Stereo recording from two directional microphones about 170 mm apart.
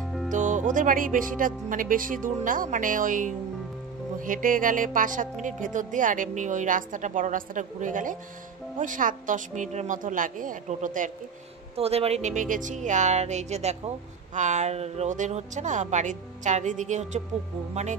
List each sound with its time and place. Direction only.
0.0 s music: centre (ahead or behind)
0.3 s speech: 45° right (ahead or behind)
11.7 s speech: 35° right (ahead or behind)